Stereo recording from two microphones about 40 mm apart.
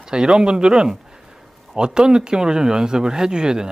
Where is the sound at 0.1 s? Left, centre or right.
Centre.